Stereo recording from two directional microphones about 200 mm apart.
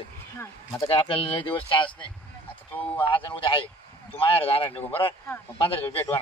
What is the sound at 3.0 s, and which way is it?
Speech, 25° left (ahead or behind).